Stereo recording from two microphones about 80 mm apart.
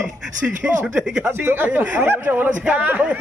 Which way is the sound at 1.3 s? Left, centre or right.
Right.